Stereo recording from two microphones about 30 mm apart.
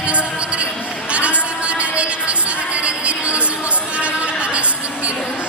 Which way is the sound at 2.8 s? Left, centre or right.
Right.